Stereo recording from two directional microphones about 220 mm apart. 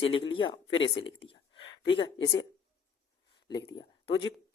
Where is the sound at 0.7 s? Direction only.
60° left (ahead or behind).